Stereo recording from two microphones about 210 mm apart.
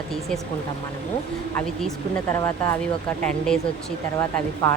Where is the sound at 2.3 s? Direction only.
15° left (ahead or behind).